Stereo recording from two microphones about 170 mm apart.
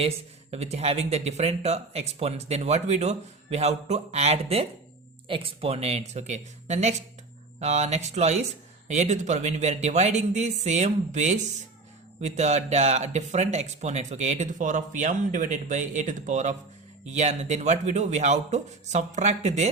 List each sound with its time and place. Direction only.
0.5 s speech: 40° right (ahead or behind)